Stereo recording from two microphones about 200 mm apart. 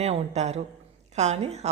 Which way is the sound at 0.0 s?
35° right (ahead or behind).